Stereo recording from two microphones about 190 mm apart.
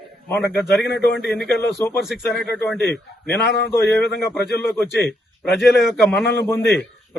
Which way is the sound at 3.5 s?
60° left (ahead or behind).